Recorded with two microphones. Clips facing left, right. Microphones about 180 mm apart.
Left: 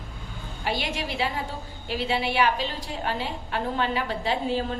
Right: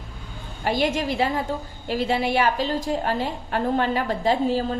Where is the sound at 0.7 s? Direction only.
45° right (ahead or behind).